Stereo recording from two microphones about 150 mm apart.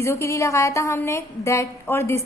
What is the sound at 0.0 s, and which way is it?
A woman's voice, 20° left (ahead or behind).